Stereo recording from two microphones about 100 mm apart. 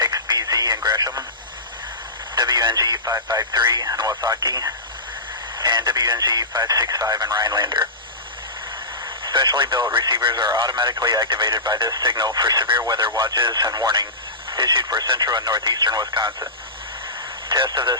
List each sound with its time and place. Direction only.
0.0 s radio: 40° right (ahead or behind)
2.3 s speech: 45° right (ahead or behind)
9.2 s speech: 45° right (ahead or behind)
17.5 s speech: 45° right (ahead or behind)